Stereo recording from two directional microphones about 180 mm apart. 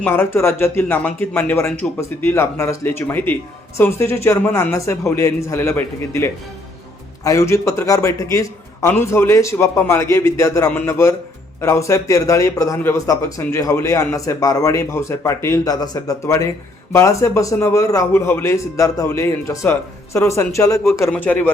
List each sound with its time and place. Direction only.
0.0 s a man's voice: 10° left (ahead or behind)